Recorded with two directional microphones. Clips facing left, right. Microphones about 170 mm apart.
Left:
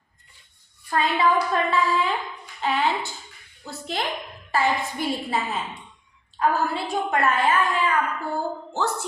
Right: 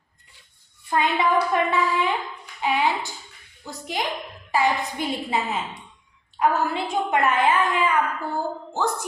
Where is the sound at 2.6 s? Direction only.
10° right (ahead or behind).